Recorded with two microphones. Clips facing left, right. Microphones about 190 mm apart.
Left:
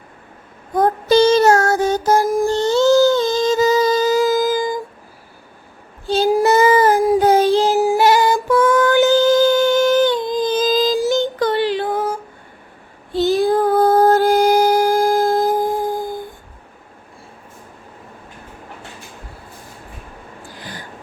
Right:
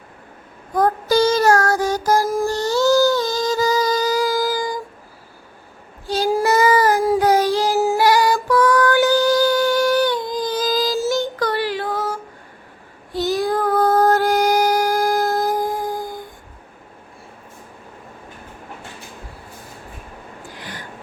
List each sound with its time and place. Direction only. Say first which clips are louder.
0.7 s child singing: left 3 dB; 25° left (ahead or behind)
6.1 s child singing: left 4 dB; 25° left (ahead or behind)
7.8 s female singing: left 2 dB; 20° left (ahead or behind)
13.1 s music: left 5 dB; 25° left (ahead or behind)
20.6 s a sound: left 2 dB; 30° left (ahead or behind)